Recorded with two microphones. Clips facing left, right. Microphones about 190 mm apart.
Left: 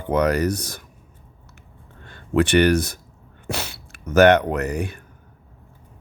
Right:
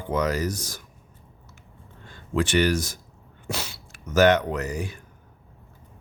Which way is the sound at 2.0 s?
60° left (ahead or behind).